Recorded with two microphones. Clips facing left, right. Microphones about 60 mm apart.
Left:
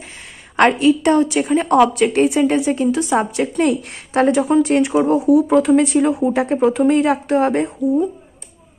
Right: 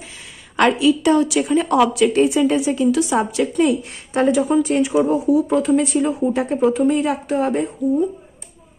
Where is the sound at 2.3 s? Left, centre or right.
Left.